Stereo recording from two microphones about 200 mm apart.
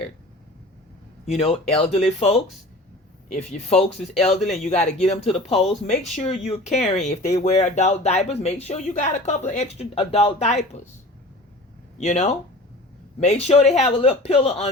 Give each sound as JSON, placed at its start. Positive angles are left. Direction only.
{"t": 1.4, "sound": "speech", "side_deg": 30}
{"t": 4.4, "sound": "speech", "side_deg": 0}
{"t": 4.7, "sound": "speech", "side_deg": 30}
{"t": 11.9, "sound": "speech", "side_deg": 35}